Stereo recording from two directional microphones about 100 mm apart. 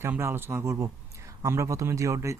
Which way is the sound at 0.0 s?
25° right (ahead or behind).